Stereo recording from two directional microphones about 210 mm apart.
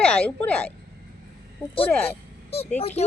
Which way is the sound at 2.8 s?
30° left (ahead or behind).